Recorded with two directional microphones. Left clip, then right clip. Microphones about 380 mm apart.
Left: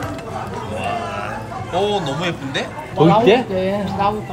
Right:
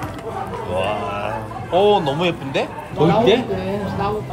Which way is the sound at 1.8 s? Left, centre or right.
Centre.